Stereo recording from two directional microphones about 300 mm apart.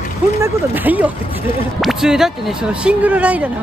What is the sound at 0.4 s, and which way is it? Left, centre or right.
Speech, centre.